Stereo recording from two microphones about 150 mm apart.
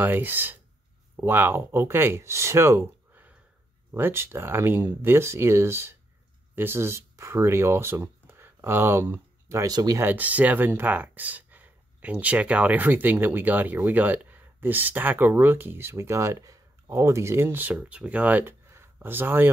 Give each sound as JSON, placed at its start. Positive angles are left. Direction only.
{"t": 0.0, "sound": "speech", "side_deg": -15}
{"t": 10.0, "sound": "speech", "side_deg": -10}